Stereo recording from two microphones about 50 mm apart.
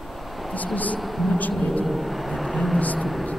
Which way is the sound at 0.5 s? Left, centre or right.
Left.